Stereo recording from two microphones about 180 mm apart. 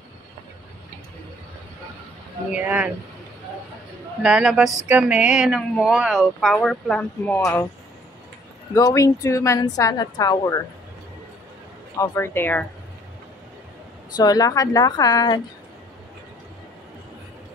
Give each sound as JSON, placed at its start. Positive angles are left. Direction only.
{"t": 2.5, "sound": "speech", "side_deg": -5}
{"t": 4.2, "sound": "speech", "side_deg": -5}
{"t": 8.7, "sound": "a woman's voice", "side_deg": 15}
{"t": 12.0, "sound": "speech", "side_deg": 15}
{"t": 14.1, "sound": "a woman's voice", "side_deg": 20}